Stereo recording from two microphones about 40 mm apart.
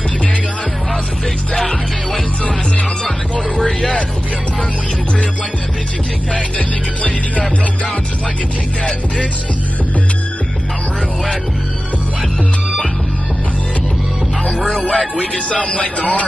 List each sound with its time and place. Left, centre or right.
1.5 s music: centre
3.5 s vehicle: left
7.0 s music: left
14.9 s speech: left